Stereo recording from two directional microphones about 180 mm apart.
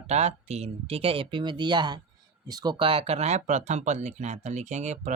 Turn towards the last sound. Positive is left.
turn(degrees=-40)  # may be behind; listen again after turning